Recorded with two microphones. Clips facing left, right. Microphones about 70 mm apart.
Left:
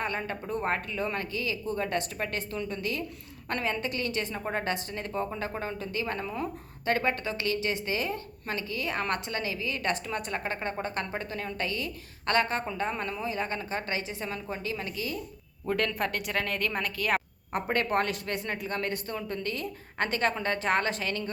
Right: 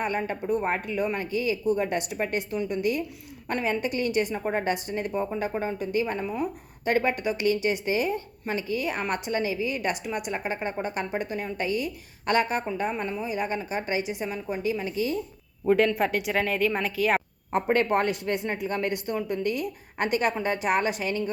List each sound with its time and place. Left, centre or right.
0.0 s a woman's voice: centre
14.9 s a woman's voice: right
15.6 s a woman's voice: centre
17.7 s a woman's voice: right